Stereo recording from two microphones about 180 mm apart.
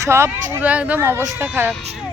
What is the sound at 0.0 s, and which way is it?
Speech, 15° right (ahead or behind).